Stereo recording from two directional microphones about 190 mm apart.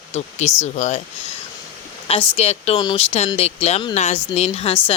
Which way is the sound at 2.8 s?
20° left (ahead or behind).